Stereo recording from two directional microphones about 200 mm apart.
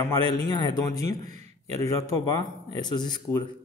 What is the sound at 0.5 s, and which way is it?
Speech, 20° left (ahead or behind).